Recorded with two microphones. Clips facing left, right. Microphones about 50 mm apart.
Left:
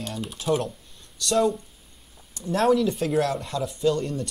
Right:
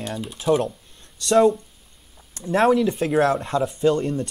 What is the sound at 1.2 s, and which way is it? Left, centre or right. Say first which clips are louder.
Speech: right 6 dB; right.